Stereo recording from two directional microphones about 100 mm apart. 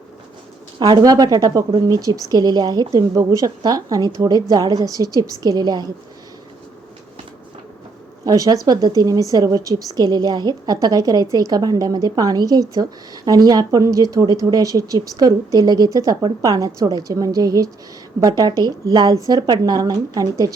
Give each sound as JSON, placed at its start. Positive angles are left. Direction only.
{"t": 0.8, "sound": "a woman's voice", "side_deg": -45}
{"t": 8.2, "sound": "a woman's voice", "side_deg": -40}